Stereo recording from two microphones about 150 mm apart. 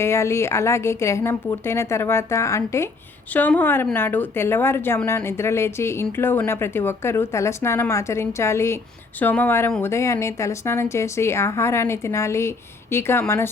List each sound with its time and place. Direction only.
0.0 s a woman's voice: 20° left (ahead or behind)